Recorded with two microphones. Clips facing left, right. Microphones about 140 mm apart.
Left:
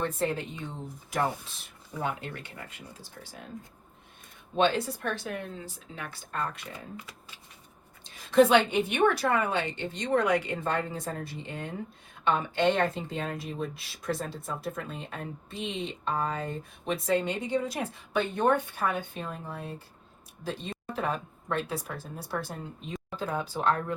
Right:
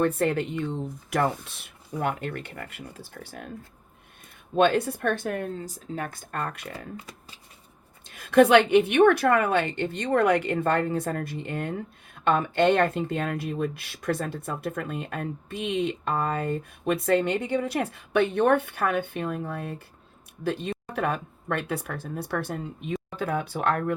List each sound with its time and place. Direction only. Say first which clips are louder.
0.0 s speech: right 6 dB; 60° right (ahead or behind)
2.0 s speech: right 5 dB; 60° right (ahead or behind)
4.5 s speech: right 4 dB; 55° right (ahead or behind)
8.0 s speech: right 3 dB; 60° right (ahead or behind)